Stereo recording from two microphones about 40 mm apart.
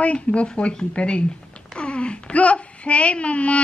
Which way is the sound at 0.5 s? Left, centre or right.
Left.